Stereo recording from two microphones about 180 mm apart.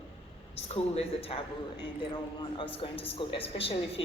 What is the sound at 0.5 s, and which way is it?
Speech, 35° left (ahead or behind).